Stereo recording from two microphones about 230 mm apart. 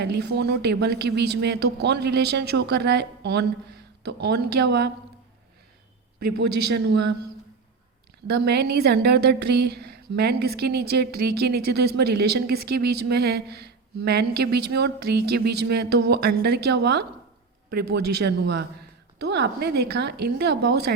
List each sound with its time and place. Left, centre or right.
0.0 s a woman's voice: right
6.1 s a woman's voice: right
8.3 s a woman's voice: right